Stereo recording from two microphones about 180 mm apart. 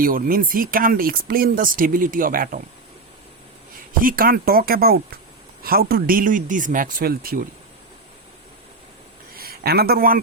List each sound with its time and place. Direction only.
0.0 s speech: 50° right (ahead or behind)
4.0 s speech: 55° right (ahead or behind)
9.3 s a sound: 55° right (ahead or behind)